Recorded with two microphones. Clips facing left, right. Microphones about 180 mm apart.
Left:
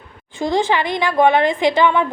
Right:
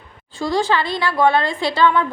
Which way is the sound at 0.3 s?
20° left (ahead or behind).